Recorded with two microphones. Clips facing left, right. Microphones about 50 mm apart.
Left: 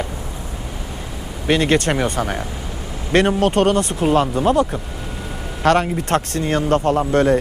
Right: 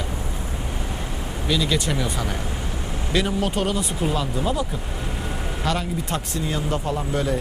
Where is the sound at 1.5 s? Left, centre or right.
Left.